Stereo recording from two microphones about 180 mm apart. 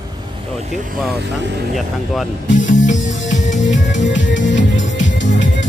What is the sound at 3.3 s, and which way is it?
Music, 45° left (ahead or behind).